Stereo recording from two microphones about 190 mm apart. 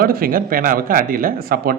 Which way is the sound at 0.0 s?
50° right (ahead or behind).